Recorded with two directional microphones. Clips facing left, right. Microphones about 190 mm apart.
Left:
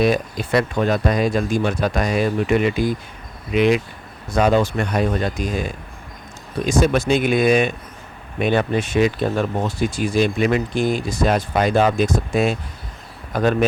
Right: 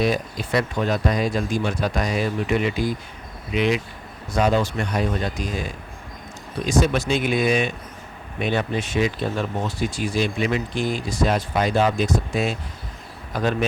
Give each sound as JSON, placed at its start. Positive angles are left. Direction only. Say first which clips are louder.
{"t": 0.0, "sound": "speech", "louder": "left 4 dB", "side_deg": 55}
{"t": 6.7, "sound": "speech", "louder": "left 3 dB", "side_deg": 50}